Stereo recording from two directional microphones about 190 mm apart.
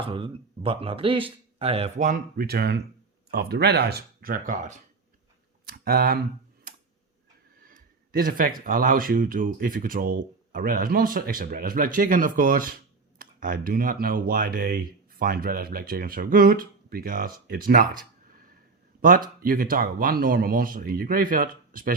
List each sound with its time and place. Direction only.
0.0 s speech: 30° right (ahead or behind)
5.6 s speech: 55° right (ahead or behind)
7.6 s a sound: 50° right (ahead or behind)
8.6 s speech: 45° right (ahead or behind)
19.4 s speech: 50° right (ahead or behind)